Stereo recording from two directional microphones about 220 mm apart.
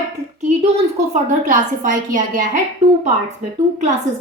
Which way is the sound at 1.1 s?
35° right (ahead or behind).